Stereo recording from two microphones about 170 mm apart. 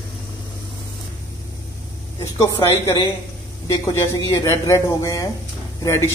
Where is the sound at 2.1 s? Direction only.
15° left (ahead or behind).